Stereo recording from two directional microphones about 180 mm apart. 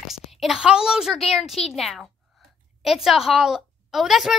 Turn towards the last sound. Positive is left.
turn(degrees=0)  # may be behind; listen again after turning